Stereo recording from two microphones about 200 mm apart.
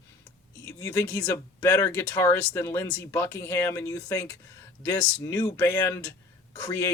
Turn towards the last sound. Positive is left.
turn(degrees=15)  # may be behind; listen again after turning